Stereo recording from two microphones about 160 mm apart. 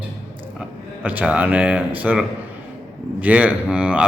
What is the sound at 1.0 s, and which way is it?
A man's voice, 10° right (ahead or behind).